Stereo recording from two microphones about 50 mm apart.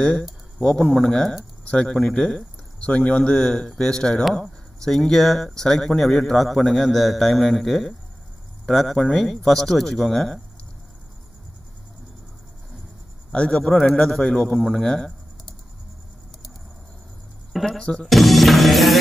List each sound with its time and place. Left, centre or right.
0.6 s speech: centre
2.8 s speech: left; by 10.4 s centre
13.3 s speech: left
17.5 s a sound: centre
17.7 s speech: centre
18.0 s music: centre